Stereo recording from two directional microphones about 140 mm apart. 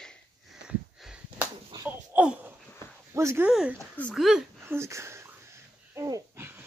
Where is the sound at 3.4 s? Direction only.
5° right (ahead or behind).